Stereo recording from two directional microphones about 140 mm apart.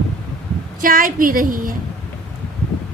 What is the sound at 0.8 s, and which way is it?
Speech, 90° right.